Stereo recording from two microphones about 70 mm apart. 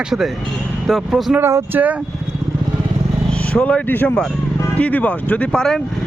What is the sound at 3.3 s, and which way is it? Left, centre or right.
Speech, centre.